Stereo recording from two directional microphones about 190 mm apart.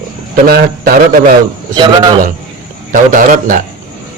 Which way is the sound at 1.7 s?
20° right (ahead or behind).